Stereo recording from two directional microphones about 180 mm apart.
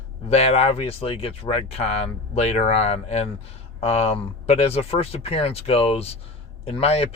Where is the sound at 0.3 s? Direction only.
35° left (ahead or behind).